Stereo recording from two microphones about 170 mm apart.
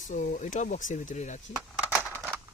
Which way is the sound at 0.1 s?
45° left (ahead or behind).